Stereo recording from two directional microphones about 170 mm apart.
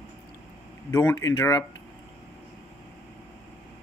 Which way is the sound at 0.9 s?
20° left (ahead or behind).